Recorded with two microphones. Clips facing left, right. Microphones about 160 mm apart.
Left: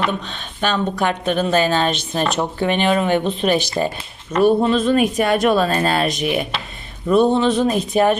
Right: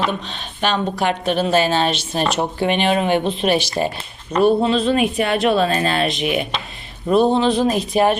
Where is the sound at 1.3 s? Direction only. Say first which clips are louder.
Even; 45° left (ahead or behind).